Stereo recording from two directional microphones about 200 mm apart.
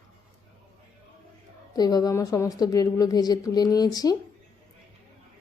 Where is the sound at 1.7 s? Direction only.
20° left (ahead or behind).